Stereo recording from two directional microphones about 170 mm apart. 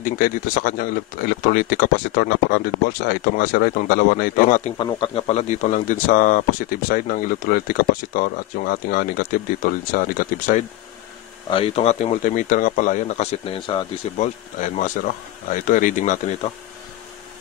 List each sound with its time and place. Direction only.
0.0 s speech: 55° left (ahead or behind)
1.4 s speech: 65° left (ahead or behind)
4.6 s speech: 30° left (ahead or behind); by 10.6 s 55° left (ahead or behind)
11.5 s speech: 35° left (ahead or behind)
14.1 s speech: 45° left (ahead or behind)